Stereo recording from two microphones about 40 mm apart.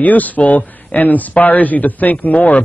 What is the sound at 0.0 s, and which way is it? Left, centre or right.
A man's voice, left.